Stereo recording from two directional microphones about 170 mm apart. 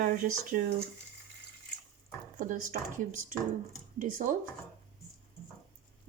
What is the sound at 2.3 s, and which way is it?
Speech, 50° right (ahead or behind).